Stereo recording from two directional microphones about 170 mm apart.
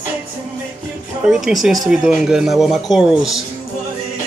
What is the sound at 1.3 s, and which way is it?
Speech, centre (ahead or behind).